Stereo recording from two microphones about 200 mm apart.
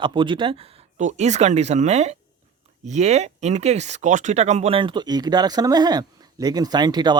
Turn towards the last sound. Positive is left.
turn(degrees=-20)  # may be behind; listen again after turning